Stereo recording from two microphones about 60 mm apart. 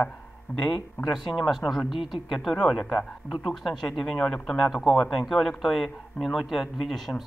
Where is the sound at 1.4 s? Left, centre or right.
Centre.